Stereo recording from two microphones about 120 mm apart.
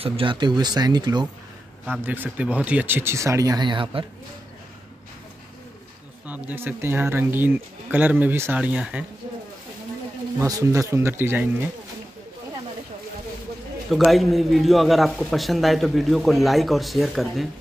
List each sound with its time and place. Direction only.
0.0 s speech: 45° right (ahead or behind)
2.0 s speech: 15° right (ahead or behind)
3.6 s speech: 45° right (ahead or behind)
6.2 s speech: 15° right (ahead or behind)
10.4 s speech: 25° right (ahead or behind)
13.8 s a man's voice: centre (ahead or behind)